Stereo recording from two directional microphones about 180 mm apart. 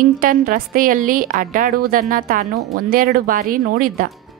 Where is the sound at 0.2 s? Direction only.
50° right (ahead or behind).